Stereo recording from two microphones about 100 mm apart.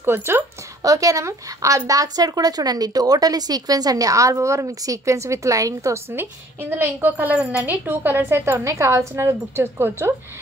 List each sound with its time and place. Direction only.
0.0 s a woman's voice: 25° right (ahead or behind)
6.1 s a woman's voice: 20° right (ahead or behind)